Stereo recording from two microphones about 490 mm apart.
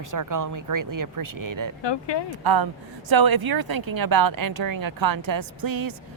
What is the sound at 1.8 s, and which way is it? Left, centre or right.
Speech, left.